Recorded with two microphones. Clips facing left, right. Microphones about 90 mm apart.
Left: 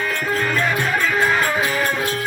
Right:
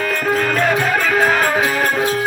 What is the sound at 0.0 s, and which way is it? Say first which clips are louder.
Music: right 4 dB; 60° right (ahead or behind).